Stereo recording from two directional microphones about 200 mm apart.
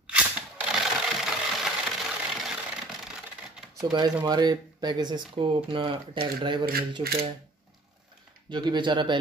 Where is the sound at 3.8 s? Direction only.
20° right (ahead or behind).